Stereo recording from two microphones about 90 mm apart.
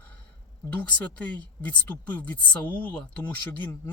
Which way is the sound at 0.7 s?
15° left (ahead or behind).